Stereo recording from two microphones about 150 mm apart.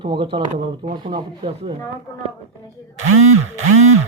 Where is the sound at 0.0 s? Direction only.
30° right (ahead or behind).